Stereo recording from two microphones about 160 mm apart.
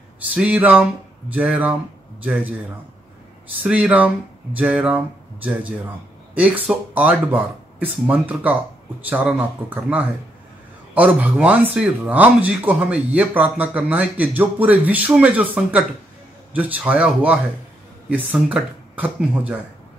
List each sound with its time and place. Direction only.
0.3 s speech: 10° right (ahead or behind)
3.6 s speech: 10° right (ahead or behind)
11.0 s speech: 10° right (ahead or behind)